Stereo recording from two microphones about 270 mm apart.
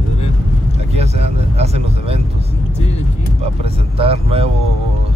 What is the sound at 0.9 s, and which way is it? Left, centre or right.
Vehicle, right.